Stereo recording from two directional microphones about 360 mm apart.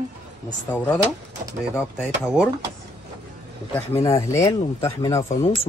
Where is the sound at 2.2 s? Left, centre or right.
Centre.